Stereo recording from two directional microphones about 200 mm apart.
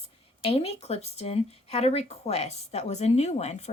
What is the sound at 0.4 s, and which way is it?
Speech, 30° left (ahead or behind).